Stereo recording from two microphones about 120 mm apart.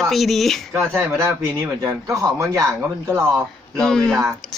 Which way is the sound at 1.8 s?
25° right (ahead or behind).